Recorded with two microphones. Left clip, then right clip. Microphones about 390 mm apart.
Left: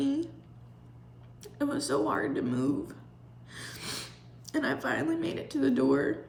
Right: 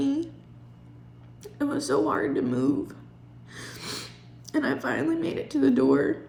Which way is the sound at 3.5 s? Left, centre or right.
Centre.